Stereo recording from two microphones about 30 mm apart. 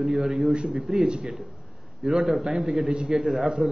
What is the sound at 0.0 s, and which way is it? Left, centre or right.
Speech, centre.